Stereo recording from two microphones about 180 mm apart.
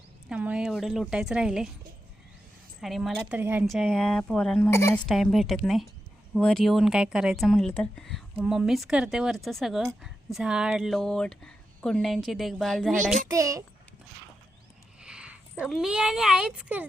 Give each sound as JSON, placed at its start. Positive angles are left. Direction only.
{"t": 0.3, "sound": "speech", "side_deg": -5}
{"t": 2.8, "sound": "speech", "side_deg": 0}
{"t": 5.0, "sound": "speech", "side_deg": 0}
{"t": 13.3, "sound": "a child's voice", "side_deg": -20}
{"t": 15.0, "sound": "speech", "side_deg": -5}